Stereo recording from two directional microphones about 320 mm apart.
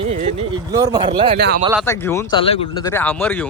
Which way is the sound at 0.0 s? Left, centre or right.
Centre.